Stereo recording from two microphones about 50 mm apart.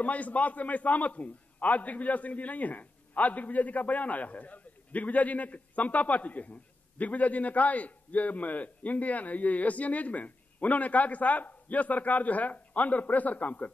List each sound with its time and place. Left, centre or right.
0.0 s a man's voice: left